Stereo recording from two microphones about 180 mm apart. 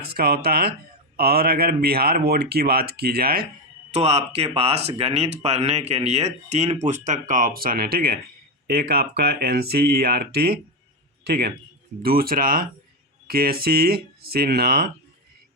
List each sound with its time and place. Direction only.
0.0 s speech: 60° right (ahead or behind)
3.9 s a man's voice: 35° right (ahead or behind); by 14.8 s 60° right (ahead or behind)